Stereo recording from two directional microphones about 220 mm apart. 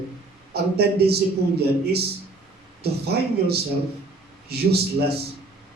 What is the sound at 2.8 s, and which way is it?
Speech, 45° right (ahead or behind).